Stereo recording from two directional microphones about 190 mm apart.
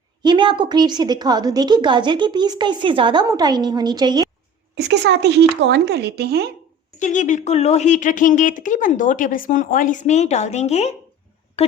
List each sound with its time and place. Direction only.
0.2 s a woman's voice: 25° right (ahead or behind)
4.7 s a woman's voice: 65° right (ahead or behind)
7.0 s speech: 40° left (ahead or behind)